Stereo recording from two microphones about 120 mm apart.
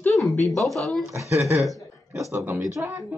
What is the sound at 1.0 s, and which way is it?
Speech, 25° right (ahead or behind).